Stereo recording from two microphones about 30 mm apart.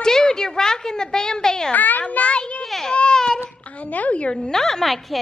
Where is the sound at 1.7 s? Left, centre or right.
Left.